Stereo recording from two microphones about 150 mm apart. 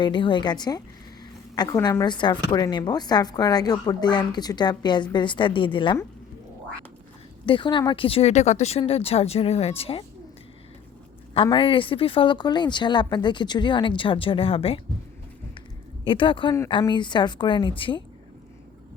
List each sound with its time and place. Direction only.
0.0 s speech: 35° left (ahead or behind)
7.4 s speech: 35° left (ahead or behind)
11.4 s speech: 35° left (ahead or behind)
16.0 s speech: 35° left (ahead or behind)